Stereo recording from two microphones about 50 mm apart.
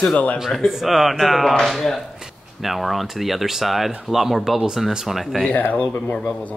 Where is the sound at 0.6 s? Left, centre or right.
Centre.